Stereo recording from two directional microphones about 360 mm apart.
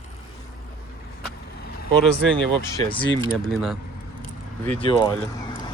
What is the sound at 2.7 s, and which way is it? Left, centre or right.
Speech, centre.